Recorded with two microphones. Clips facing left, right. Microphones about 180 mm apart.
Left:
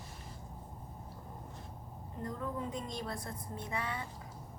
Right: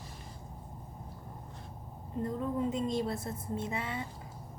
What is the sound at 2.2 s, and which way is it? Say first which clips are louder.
A woman's voice: right 6 dB; 25° right (ahead or behind).